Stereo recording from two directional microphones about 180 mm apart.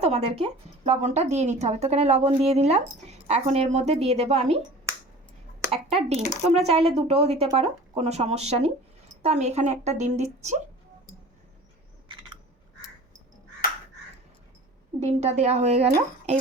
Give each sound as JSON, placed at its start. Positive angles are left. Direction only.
{"t": 0.0, "sound": "speech", "side_deg": -35}
{"t": 5.7, "sound": "speech", "side_deg": -30}
{"t": 15.0, "sound": "speech", "side_deg": -35}